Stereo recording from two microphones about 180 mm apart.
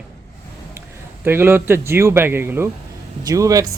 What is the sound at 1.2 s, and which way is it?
A man's voice, 10° right (ahead or behind).